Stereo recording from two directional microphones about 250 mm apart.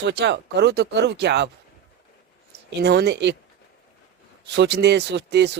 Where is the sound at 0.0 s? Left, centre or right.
Right.